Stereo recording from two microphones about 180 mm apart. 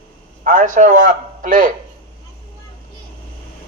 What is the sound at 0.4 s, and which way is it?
A man's voice, 45° right (ahead or behind).